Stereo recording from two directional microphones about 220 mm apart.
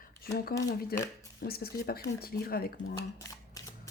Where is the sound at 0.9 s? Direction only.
45° left (ahead or behind).